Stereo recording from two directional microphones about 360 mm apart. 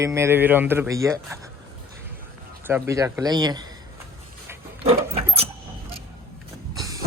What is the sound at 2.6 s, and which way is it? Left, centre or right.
Speech, centre.